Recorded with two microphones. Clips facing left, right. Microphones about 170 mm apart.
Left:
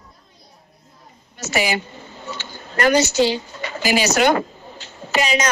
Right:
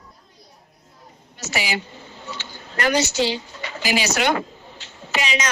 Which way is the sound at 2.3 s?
50° left (ahead or behind).